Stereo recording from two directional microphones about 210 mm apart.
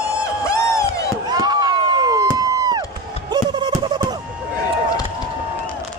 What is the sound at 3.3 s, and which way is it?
Music, 20° right (ahead or behind).